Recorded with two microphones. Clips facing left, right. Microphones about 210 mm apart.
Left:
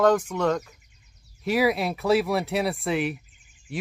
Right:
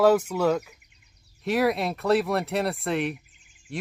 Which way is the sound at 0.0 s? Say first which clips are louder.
Right 1 dB; 5° right (ahead or behind).